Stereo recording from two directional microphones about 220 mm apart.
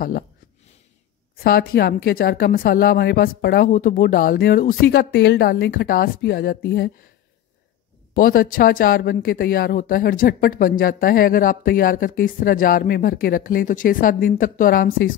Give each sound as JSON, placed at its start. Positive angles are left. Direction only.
{"t": 1.4, "sound": "speech", "side_deg": 45}
{"t": 8.1, "sound": "speech", "side_deg": 40}